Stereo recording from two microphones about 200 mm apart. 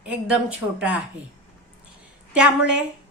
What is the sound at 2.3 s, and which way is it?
Speech, 5° right (ahead or behind).